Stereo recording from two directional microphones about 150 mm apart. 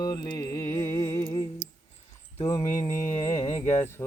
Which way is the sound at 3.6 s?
15° left (ahead or behind).